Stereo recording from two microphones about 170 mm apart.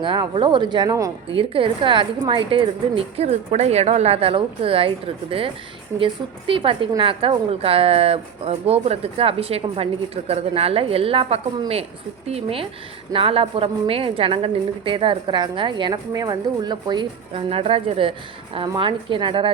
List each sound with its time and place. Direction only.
0.0 s speech: 30° right (ahead or behind)
1.4 s a woman's voice: 30° right (ahead or behind)
6.5 s a woman's voice: 30° right (ahead or behind)